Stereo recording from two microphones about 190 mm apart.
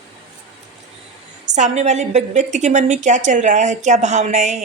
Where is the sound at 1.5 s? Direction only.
35° right (ahead or behind).